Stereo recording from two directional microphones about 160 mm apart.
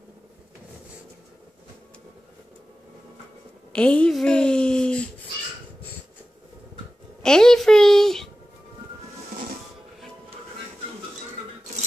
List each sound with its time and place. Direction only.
3.7 s speech: 5° left (ahead or behind)
7.2 s a child's voice: 5° left (ahead or behind)